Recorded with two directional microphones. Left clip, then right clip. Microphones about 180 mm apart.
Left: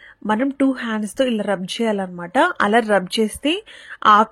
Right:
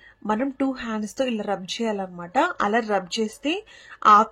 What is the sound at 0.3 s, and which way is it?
A woman's voice, 20° left (ahead or behind).